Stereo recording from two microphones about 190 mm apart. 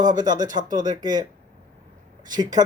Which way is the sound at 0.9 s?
20° right (ahead or behind).